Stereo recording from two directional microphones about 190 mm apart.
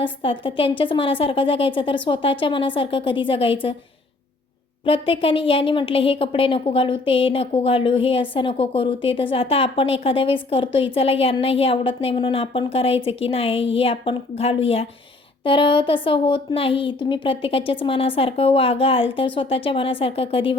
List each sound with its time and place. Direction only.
0.0 s speech: 25° left (ahead or behind)
4.9 s speech: 30° left (ahead or behind)